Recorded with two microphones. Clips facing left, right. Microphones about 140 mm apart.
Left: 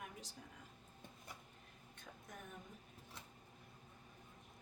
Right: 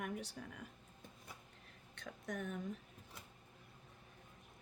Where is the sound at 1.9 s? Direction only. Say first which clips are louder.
Right 11 dB; 80° right.